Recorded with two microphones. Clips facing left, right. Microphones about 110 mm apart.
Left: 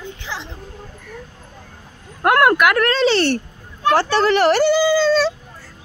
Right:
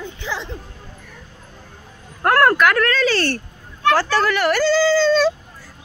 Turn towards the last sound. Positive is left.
turn(degrees=0)  # may be behind; listen again after turning